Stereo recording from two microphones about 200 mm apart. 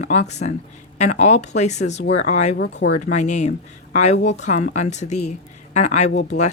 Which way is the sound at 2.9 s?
35° left (ahead or behind).